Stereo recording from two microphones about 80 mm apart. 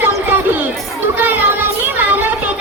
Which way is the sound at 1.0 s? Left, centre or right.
Right.